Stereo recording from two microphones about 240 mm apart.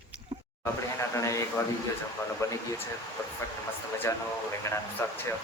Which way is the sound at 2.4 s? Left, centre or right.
Centre.